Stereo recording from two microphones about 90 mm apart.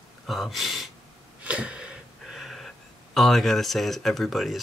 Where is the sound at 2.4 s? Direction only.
Centre (ahead or behind).